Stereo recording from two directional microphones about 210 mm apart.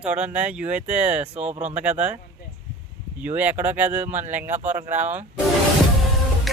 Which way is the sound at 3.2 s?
5° right (ahead or behind).